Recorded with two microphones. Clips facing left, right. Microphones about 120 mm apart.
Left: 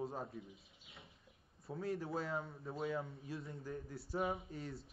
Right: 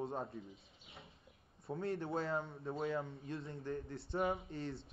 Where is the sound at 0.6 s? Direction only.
25° right (ahead or behind).